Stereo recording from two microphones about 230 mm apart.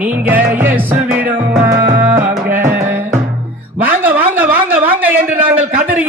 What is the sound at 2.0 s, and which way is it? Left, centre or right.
Music, centre.